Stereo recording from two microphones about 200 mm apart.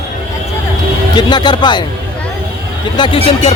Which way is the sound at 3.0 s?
25° left (ahead or behind).